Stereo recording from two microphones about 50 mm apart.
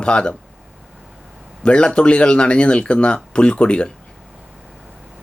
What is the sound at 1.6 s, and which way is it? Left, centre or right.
Speech, centre.